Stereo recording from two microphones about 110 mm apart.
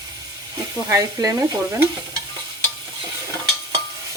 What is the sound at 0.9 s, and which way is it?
Stir, 25° right (ahead or behind).